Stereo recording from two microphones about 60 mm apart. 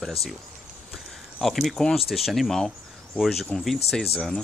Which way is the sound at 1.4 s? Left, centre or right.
Centre.